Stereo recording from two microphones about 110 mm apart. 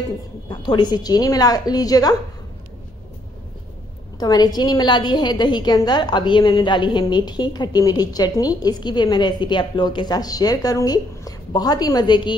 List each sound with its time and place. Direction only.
0.5 s a woman's voice: 40° left (ahead or behind)
4.2 s a woman's voice: 40° left (ahead or behind)